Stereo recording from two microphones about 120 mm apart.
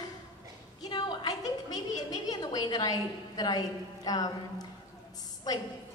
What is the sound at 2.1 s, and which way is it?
A woman's voice, 35° left (ahead or behind).